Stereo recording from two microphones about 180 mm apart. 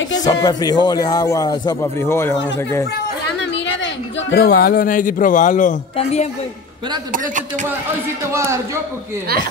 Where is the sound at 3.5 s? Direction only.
85° left; by 6.2 s 35° left (ahead or behind).